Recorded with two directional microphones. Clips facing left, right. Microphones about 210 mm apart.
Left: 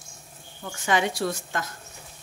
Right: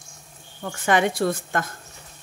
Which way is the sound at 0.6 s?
55° right (ahead or behind).